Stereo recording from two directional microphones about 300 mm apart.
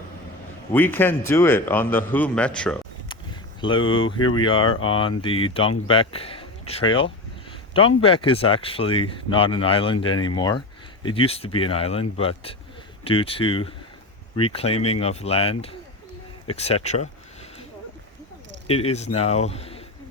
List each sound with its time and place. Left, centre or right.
0.7 s a man's voice: centre
3.6 s speech: centre
3.8 s speech: left
4.4 s speech: centre
18.7 s speech: centre